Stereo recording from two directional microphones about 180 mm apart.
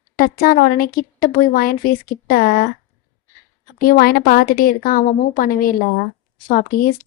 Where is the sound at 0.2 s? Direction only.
55° left (ahead or behind).